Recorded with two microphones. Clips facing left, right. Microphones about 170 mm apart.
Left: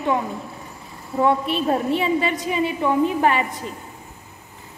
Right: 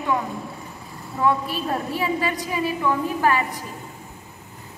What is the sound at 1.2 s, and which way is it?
A woman's voice, 25° left (ahead or behind).